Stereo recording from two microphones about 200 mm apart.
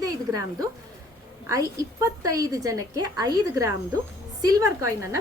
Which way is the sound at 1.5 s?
15° right (ahead or behind).